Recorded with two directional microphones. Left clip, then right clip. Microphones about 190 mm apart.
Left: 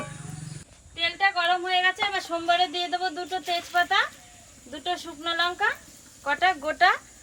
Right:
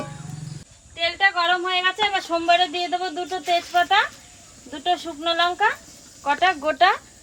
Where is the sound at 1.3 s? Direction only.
10° right (ahead or behind).